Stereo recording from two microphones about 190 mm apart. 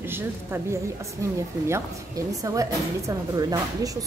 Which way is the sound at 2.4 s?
15° right (ahead or behind).